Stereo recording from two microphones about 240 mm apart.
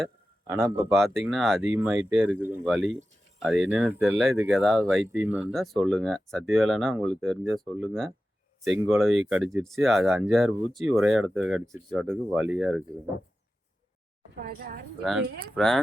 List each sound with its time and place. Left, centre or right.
0.4 s speech: centre
3.4 s speech: centre
14.4 s a woman's voice: right
15.0 s speech: centre